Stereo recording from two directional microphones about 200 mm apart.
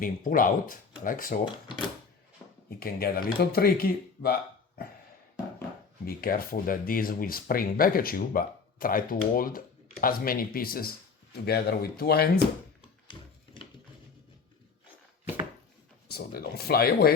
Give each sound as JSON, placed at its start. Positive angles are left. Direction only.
{"t": 0.0, "sound": "speech", "side_deg": 45}
{"t": 2.6, "sound": "speech", "side_deg": 50}
{"t": 6.1, "sound": "speech", "side_deg": 50}
{"t": 13.1, "sound": "a sound", "side_deg": 25}
{"t": 16.0, "sound": "speech", "side_deg": 50}